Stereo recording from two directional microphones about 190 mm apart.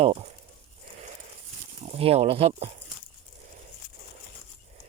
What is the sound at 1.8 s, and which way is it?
Speech, 35° right (ahead or behind).